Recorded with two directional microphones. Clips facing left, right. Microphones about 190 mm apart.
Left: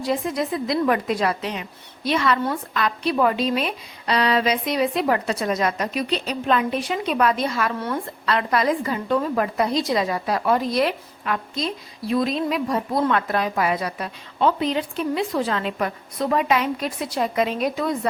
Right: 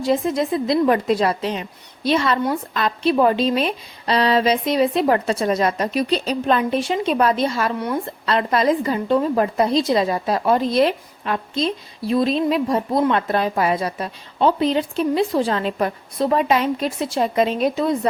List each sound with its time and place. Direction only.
0.0 s a woman's voice: 25° right (ahead or behind)